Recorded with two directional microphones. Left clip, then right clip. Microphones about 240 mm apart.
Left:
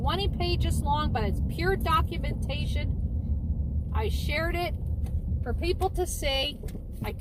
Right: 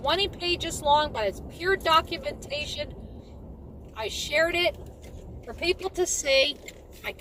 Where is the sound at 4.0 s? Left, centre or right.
Right.